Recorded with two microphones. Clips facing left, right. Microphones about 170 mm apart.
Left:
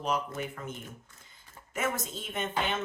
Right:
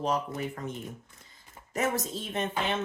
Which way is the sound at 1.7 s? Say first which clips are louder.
Right 3 dB; 35° right (ahead or behind).